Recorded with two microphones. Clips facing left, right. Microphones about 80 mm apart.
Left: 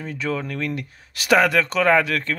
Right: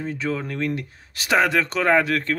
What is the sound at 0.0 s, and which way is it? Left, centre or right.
Speech, right.